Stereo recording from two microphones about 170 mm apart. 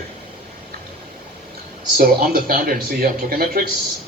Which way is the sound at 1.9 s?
60° right (ahead or behind).